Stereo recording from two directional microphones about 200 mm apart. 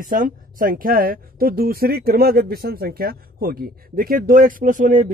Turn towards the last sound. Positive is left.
turn(degrees=-40)  # may be behind; listen again after turning